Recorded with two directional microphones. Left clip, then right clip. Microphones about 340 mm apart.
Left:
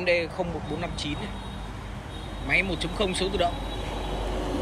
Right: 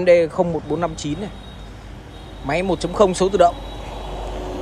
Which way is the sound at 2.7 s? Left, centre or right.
Centre.